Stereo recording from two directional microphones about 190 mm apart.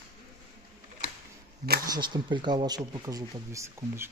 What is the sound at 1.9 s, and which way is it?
Speech, 25° right (ahead or behind).